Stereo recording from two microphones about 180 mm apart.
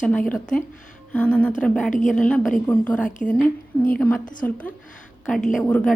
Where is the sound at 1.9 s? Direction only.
45° left (ahead or behind).